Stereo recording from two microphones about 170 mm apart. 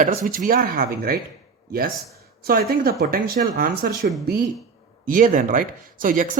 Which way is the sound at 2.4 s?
65° right (ahead or behind).